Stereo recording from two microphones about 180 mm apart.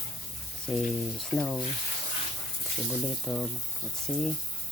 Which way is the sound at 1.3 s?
5° left (ahead or behind).